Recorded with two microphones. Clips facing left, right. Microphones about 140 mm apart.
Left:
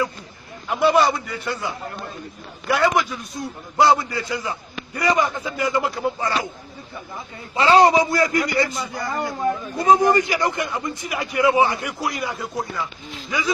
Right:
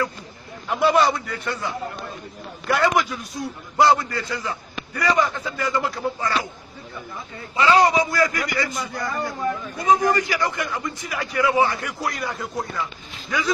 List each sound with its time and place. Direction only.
0.7 s a man's voice: centre (ahead or behind)
2.7 s a man's voice: centre (ahead or behind)
4.3 s a man's voice: 15° left (ahead or behind)
7.5 s a man's voice: 30° left (ahead or behind); by 13.5 s 10° left (ahead or behind)